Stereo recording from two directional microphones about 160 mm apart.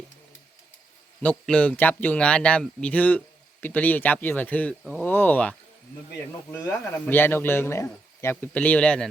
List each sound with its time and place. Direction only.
1.2 s speech: 10° left (ahead or behind)